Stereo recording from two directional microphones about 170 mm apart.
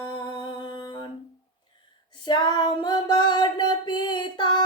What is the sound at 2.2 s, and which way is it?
Singing, 25° left (ahead or behind).